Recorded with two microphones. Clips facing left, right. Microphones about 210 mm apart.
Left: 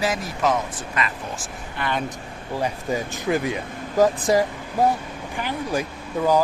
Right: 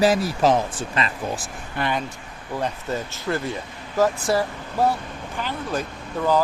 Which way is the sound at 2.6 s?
10° left (ahead or behind).